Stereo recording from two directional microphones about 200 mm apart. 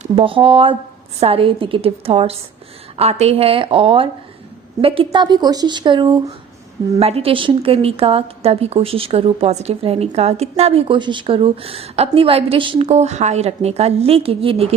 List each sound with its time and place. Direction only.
0.0 s a woman's voice: 25° right (ahead or behind)